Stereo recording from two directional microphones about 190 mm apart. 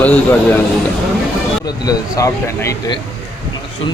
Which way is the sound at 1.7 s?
20° left (ahead or behind).